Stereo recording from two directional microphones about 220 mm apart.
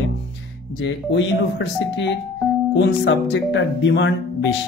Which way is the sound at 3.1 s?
55° left (ahead or behind).